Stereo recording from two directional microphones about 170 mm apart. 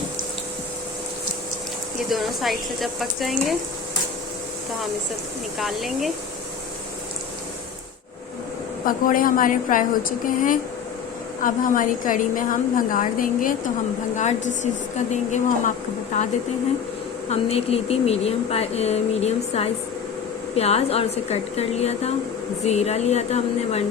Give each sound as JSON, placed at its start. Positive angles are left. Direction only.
{"t": 2.0, "sound": "speech", "side_deg": 0}
{"t": 5.5, "sound": "speech", "side_deg": 0}
{"t": 8.8, "sound": "a woman's voice", "side_deg": 55}
{"t": 17.2, "sound": "speech", "side_deg": 35}